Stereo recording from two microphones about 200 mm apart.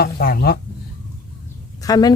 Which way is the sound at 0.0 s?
50° left (ahead or behind).